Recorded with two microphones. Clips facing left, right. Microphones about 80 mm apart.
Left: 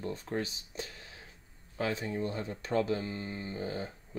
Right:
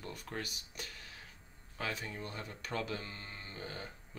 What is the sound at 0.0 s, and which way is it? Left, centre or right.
Speech, left.